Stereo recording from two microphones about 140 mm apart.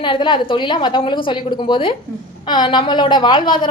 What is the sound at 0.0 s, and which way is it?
A woman's voice, 35° left (ahead or behind).